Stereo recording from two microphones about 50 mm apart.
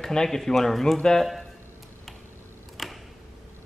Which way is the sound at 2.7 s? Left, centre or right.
Centre.